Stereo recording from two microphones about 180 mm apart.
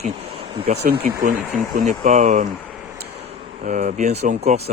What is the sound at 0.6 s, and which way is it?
Speech, 60° right (ahead or behind).